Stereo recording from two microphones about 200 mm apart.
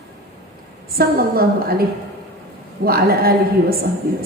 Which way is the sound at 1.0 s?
50° right (ahead or behind).